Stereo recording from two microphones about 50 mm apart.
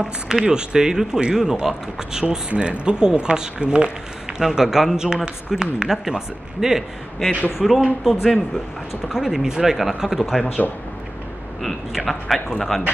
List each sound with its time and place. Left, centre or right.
0.0 s speech: centre
11.6 s speech: centre